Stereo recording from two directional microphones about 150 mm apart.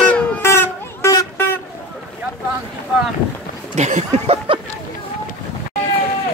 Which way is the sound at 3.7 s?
50° right (ahead or behind).